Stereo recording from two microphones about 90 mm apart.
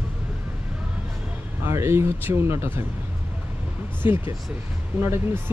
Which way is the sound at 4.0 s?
25° right (ahead or behind).